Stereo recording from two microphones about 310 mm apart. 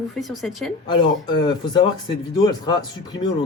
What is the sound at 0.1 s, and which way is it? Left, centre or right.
Speech, centre.